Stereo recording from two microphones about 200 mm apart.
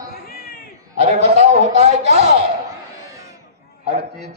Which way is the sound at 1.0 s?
35° right (ahead or behind).